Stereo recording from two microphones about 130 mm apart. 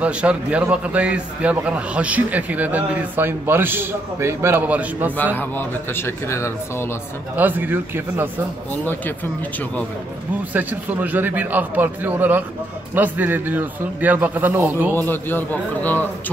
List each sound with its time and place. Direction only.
0.0 s a man's voice: 10° right (ahead or behind)
5.1 s speech: 15° left (ahead or behind)
7.3 s a man's voice: 15° right (ahead or behind)
8.8 s speech: 15° left (ahead or behind)
10.5 s a man's voice: 15° right (ahead or behind)
15.0 s speech: 15° left (ahead or behind)